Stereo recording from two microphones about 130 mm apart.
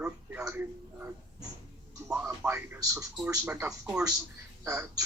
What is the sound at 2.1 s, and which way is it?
Speech, 10° right (ahead or behind).